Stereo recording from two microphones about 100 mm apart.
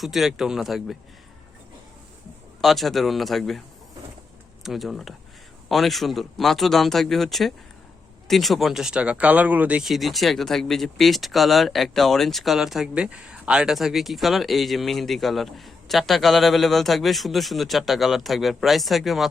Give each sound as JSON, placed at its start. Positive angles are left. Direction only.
{"t": 0.0, "sound": "speech", "side_deg": 0}
{"t": 2.6, "sound": "speech", "side_deg": 0}
{"t": 4.6, "sound": "speech", "side_deg": 0}
{"t": 9.8, "sound": "speech", "side_deg": 0}